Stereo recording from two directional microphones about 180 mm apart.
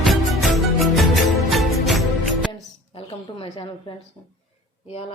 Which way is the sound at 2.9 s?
30° left (ahead or behind).